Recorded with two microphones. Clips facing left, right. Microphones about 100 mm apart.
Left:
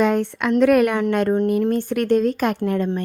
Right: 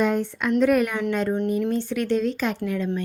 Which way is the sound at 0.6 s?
65° left (ahead or behind).